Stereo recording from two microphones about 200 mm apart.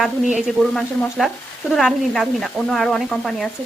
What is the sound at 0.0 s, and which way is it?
Speech, centre (ahead or behind).